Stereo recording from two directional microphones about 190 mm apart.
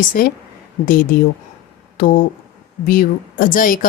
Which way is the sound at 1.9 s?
50° left (ahead or behind).